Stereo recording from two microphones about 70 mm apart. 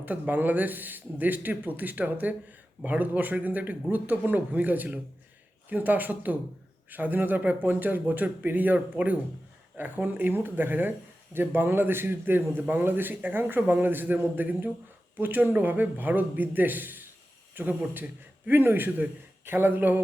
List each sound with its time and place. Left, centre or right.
0.0 s a man's voice: right